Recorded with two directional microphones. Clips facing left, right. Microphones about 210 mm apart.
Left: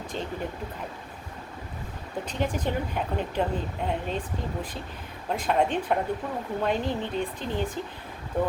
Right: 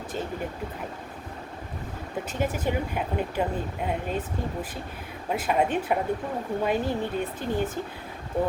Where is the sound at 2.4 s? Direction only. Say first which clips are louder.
Right 1 dB; 5° right (ahead or behind).